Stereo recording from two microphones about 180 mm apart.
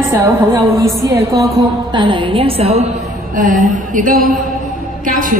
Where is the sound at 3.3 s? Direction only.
45° right (ahead or behind).